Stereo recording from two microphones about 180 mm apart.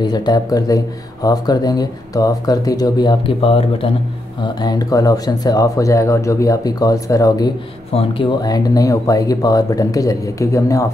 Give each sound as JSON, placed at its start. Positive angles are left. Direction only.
{"t": 0.0, "sound": "speech", "side_deg": 20}
{"t": 7.9, "sound": "speech", "side_deg": 30}